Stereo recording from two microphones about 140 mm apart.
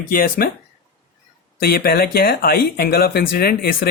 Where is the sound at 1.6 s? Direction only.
90° left.